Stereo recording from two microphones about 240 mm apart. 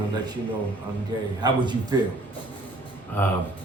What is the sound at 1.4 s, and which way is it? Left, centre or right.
Speech, centre.